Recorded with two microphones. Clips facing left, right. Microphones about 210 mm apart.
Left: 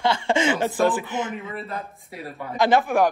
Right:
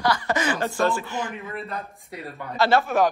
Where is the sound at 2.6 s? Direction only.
15° left (ahead or behind).